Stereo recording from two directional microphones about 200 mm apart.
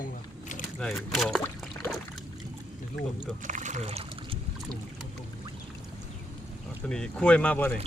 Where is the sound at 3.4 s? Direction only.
40° right (ahead or behind).